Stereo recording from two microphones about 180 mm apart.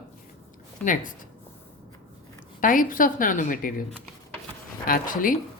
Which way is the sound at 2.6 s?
50° left (ahead or behind).